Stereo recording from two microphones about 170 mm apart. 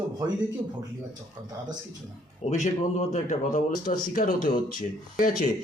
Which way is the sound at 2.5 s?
45° left (ahead or behind).